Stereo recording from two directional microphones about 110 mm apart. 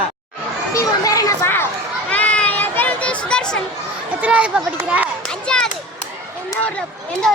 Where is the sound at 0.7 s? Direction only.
30° left (ahead or behind).